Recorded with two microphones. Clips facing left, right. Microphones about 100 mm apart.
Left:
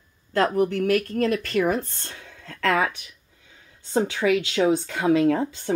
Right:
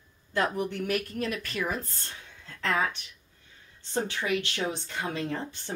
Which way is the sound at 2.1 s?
65° left (ahead or behind).